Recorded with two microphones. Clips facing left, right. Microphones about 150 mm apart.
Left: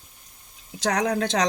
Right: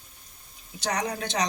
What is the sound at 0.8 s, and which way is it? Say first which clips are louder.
Speech: left 6 dB; 90° left.